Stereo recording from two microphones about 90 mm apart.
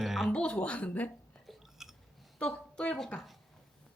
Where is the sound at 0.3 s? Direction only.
15° left (ahead or behind).